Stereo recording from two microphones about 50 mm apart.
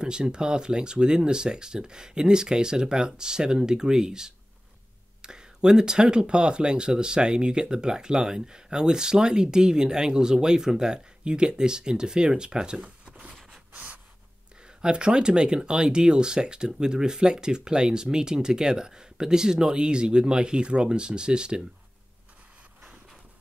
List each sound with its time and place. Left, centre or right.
0.0 s speech: centre
12.8 s a sound: right
14.8 s speech: centre